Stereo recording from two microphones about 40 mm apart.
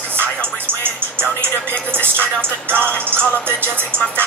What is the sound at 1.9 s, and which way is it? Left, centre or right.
Music, right.